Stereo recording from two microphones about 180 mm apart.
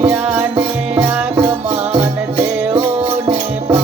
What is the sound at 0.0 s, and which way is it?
Music, 10° right (ahead or behind).